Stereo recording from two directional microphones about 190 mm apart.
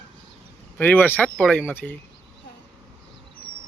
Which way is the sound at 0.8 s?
10° left (ahead or behind).